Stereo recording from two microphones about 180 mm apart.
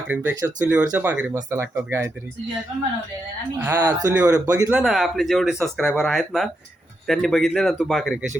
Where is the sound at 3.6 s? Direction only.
15° right (ahead or behind).